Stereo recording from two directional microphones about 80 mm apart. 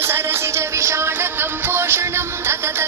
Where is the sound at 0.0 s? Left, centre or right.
Right.